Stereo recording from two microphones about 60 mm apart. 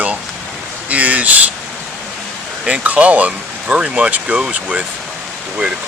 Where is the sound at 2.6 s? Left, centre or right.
Right.